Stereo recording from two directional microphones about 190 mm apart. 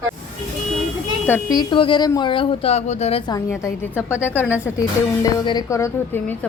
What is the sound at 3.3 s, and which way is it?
A woman's voice, 15° left (ahead or behind).